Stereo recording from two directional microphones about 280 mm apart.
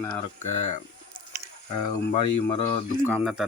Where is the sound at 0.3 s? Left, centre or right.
Left.